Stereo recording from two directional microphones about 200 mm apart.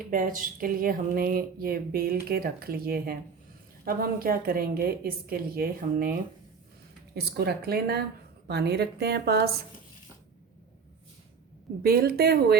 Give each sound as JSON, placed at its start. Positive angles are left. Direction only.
{"t": 0.1, "sound": "speech", "side_deg": -45}
{"t": 11.8, "sound": "speech", "side_deg": -50}